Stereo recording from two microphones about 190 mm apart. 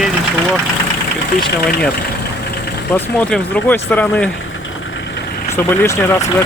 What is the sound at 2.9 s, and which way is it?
Speech, 10° left (ahead or behind).